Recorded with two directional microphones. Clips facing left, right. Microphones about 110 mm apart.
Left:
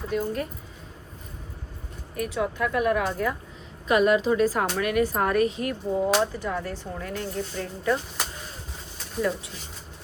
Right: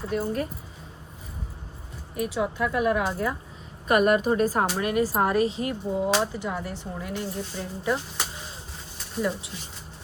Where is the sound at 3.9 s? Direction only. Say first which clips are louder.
Even; 50° right (ahead or behind).